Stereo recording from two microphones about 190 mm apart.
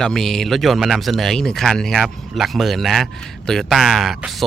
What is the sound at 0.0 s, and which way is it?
A man's voice, centre (ahead or behind).